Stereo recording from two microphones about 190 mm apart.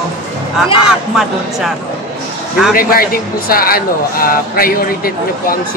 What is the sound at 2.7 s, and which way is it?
Speech, 50° left (ahead or behind).